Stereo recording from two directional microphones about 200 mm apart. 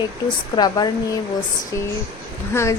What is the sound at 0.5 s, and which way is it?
Speech, 20° left (ahead or behind).